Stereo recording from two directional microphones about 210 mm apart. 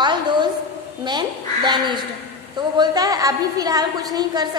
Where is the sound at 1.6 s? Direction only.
20° right (ahead or behind).